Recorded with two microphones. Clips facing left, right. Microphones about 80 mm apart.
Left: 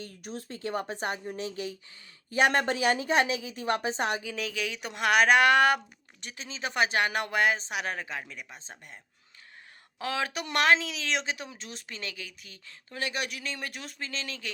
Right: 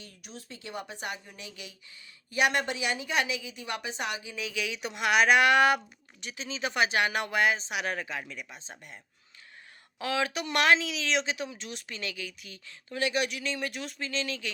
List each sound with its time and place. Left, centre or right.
0.0 s a woman's voice: left
8.6 s speech: centre
10.0 s a woman's voice: left